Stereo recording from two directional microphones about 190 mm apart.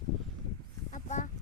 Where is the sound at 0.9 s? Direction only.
45° left (ahead or behind).